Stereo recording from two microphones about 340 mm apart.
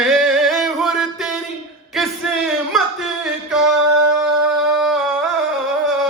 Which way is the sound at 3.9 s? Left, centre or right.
Right.